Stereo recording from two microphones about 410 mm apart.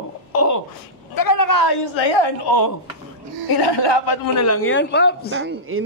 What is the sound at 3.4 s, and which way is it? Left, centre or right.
Speech, left.